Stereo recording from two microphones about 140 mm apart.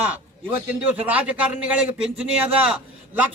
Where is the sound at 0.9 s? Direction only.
10° right (ahead or behind).